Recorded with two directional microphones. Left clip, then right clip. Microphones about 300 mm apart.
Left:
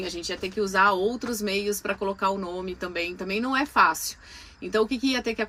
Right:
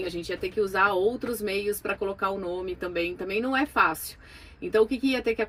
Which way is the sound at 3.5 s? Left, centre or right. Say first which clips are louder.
Left 3 dB; centre.